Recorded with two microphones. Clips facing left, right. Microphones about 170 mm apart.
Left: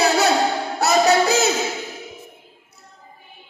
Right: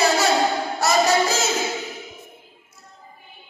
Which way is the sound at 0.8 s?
65° left (ahead or behind).